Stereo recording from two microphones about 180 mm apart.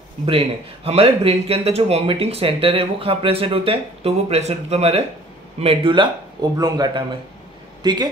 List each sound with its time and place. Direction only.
0.2 s a man's voice: 30° right (ahead or behind)